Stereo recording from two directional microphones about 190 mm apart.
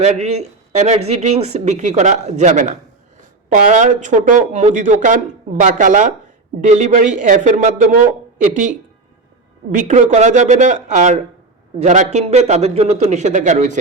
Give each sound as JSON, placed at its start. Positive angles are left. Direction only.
{"t": 0.0, "sound": "speech", "side_deg": -35}
{"t": 9.7, "sound": "speech", "side_deg": -40}